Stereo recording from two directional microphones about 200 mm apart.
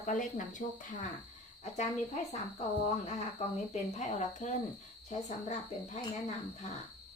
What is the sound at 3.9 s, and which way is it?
Speech, 35° left (ahead or behind).